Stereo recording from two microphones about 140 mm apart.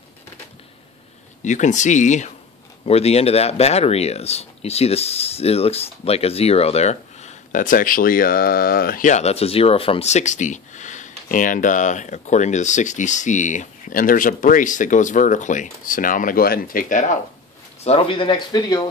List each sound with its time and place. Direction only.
1.4 s speech: 60° left (ahead or behind)
2.8 s speech: 45° left (ahead or behind); by 17.2 s 70° left (ahead or behind)
17.8 s speech: 40° left (ahead or behind)